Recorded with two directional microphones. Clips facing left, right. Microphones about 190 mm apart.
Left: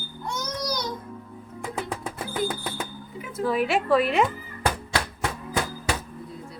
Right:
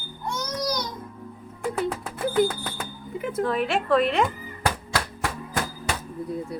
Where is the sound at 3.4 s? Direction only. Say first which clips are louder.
Left 2 dB; 5° left (ahead or behind).